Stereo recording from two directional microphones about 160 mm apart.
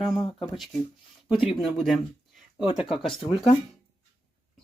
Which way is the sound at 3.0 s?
35° left (ahead or behind).